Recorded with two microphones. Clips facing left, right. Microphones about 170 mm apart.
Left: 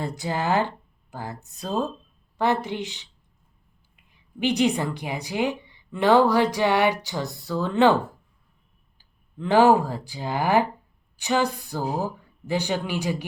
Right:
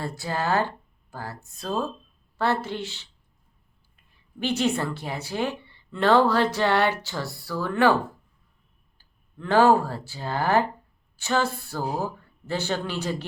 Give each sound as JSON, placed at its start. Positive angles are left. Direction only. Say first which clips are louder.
{"t": 0.0, "sound": "a woman's voice", "louder": "left 1 dB", "side_deg": 20}
{"t": 9.0, "sound": "a woman's voice", "louder": "left 5 dB", "side_deg": 15}